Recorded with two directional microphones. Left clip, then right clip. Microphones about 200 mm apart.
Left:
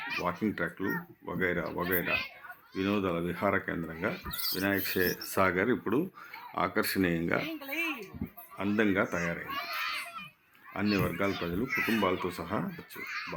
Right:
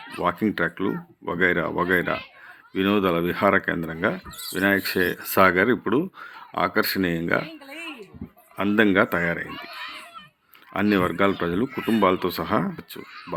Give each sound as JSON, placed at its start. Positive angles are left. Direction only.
{"t": 0.2, "sound": "speech", "side_deg": -35}
{"t": 8.5, "sound": "speech", "side_deg": -35}
{"t": 10.8, "sound": "speech", "side_deg": -35}